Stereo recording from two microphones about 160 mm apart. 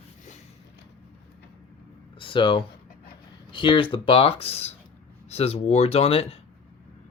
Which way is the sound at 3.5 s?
30° left (ahead or behind).